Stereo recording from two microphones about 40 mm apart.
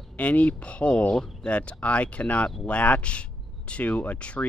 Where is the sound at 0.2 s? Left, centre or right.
Left.